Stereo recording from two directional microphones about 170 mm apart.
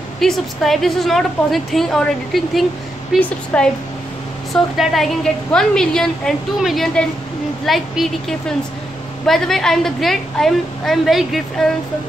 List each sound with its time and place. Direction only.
0.2 s a woman's voice: centre (ahead or behind)
3.5 s speech: 5° left (ahead or behind)
4.7 s a woman's voice: centre (ahead or behind)